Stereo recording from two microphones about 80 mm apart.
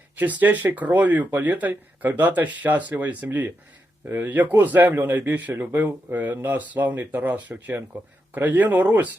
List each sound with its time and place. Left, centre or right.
0.2 s speech: right